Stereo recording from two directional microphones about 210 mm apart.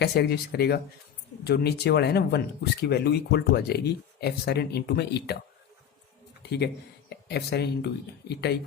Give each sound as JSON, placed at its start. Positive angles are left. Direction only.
{"t": 0.0, "sound": "speech", "side_deg": 50}
{"t": 6.4, "sound": "a sound", "side_deg": 50}
{"t": 7.3, "sound": "speech", "side_deg": 50}